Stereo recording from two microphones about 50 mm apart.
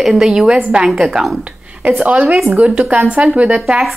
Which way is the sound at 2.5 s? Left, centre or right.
Right.